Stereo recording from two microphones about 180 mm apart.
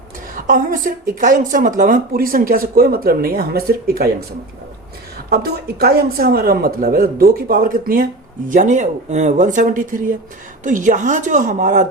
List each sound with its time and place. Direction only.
0.3 s speech: 45° right (ahead or behind)
5.1 s speech: 60° right (ahead or behind); by 11.9 s 45° right (ahead or behind)